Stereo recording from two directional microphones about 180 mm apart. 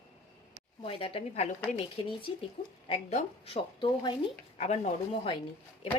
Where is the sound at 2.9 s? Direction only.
35° left (ahead or behind).